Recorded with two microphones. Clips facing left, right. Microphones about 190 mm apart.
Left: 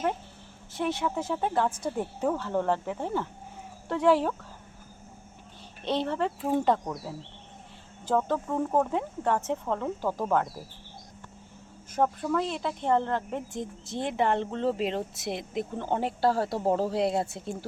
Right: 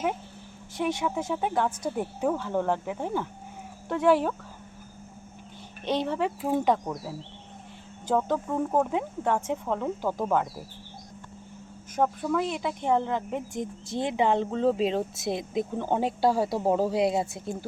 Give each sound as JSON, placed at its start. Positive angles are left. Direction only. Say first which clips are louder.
{"t": 0.8, "sound": "speech", "louder": "right 1 dB", "side_deg": -10}
{"t": 5.8, "sound": "speech", "louder": "right 1 dB", "side_deg": -10}
{"t": 8.1, "sound": "speech", "louder": "right 1 dB", "side_deg": -5}
{"t": 12.2, "sound": "speech", "louder": "right 1 dB", "side_deg": -5}